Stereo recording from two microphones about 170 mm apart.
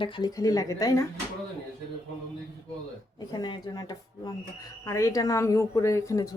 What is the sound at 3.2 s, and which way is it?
A woman's voice, 25° left (ahead or behind).